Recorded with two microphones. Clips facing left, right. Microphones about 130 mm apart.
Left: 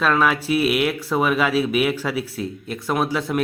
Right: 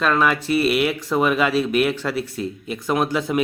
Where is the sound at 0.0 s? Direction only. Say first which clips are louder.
Even; centre (ahead or behind).